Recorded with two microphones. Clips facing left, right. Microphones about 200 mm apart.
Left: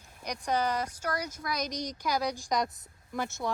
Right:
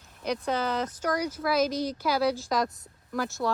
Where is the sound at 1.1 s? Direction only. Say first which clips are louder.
Right 10 dB; 10° right (ahead or behind).